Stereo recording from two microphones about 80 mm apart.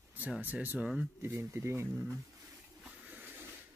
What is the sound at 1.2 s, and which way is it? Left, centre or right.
Speech, right.